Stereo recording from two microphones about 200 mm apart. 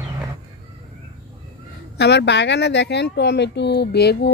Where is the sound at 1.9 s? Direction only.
60° left (ahead or behind).